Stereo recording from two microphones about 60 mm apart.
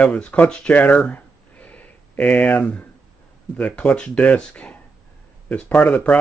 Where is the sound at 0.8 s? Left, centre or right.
Left.